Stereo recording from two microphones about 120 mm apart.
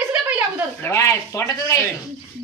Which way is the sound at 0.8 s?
25° left (ahead or behind).